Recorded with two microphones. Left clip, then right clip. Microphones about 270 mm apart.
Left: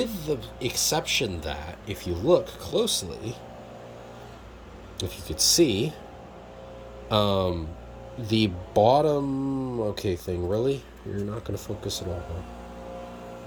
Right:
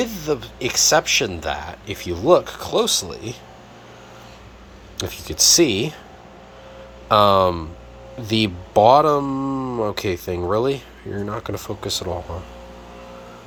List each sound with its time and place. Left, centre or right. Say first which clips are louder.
0.0 s speech: right 6 dB; centre
4.9 s speech: right 7 dB; centre
7.1 s speech: right 10 dB; centre
9.4 s speech: right 6 dB; centre
9.9 s speech: right 5 dB; centre